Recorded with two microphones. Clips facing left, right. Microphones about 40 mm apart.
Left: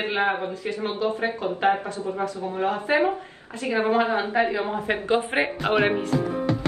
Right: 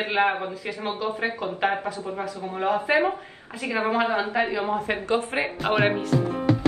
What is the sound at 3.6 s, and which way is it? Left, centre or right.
Speech, right.